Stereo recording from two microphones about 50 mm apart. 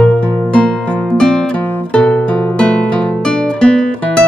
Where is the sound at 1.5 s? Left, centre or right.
Left.